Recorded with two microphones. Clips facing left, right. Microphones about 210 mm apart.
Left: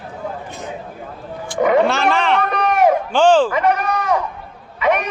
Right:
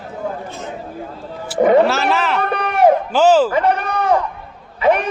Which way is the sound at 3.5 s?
30° right (ahead or behind).